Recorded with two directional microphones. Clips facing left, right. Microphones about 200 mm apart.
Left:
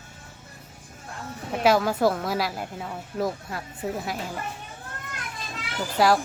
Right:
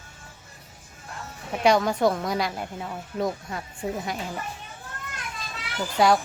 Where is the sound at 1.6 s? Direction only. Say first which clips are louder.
Even; 5° left (ahead or behind).